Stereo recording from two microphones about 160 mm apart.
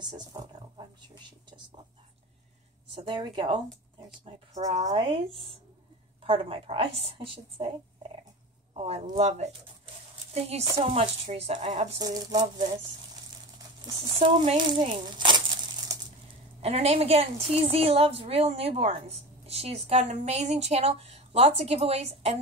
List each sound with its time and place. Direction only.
0.0 s speech: 25° right (ahead or behind)
2.9 s a woman's voice: 30° right (ahead or behind)
8.7 s a woman's voice: 40° right (ahead or behind)
12.0 s speech: 25° right (ahead or behind)
13.9 s a woman's voice: 35° right (ahead or behind)
14.7 s crumpling: 30° right (ahead or behind)
16.6 s a woman's voice: 40° right (ahead or behind)